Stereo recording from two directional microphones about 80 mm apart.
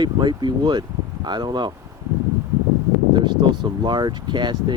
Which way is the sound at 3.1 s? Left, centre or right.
Right.